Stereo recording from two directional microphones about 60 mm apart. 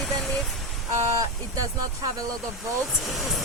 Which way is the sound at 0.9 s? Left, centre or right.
Right.